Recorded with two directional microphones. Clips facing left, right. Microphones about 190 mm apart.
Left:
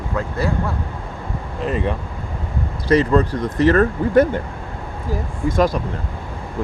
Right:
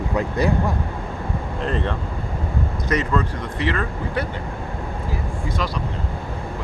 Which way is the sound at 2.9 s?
35° left (ahead or behind).